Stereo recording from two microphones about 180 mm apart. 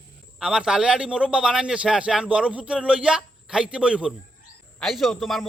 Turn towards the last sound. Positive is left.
turn(degrees=0)  # may be behind; listen again after turning